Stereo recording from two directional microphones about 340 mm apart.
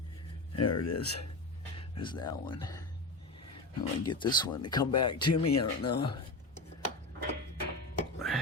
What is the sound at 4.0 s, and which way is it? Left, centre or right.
Speech, centre.